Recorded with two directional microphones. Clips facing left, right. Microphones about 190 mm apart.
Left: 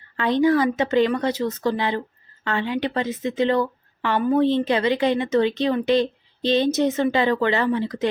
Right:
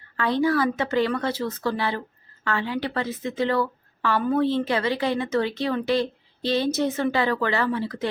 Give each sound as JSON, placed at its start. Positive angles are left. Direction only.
{"t": 0.2, "sound": "a woman's voice", "side_deg": 20}